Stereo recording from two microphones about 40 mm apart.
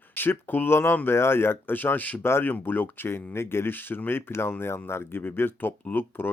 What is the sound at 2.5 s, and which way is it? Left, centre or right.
Speech, left.